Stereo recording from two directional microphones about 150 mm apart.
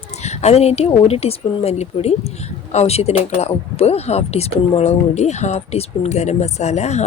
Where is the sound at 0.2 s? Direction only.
45° left (ahead or behind).